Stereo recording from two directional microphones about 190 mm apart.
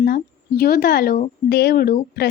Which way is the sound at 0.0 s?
55° left (ahead or behind).